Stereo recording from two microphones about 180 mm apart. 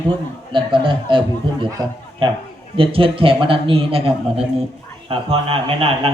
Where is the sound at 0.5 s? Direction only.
30° right (ahead or behind).